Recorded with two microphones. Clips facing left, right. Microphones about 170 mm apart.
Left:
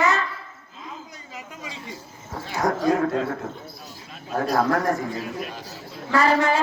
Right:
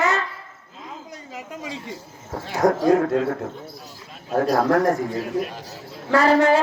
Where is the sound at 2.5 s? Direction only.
55° right (ahead or behind).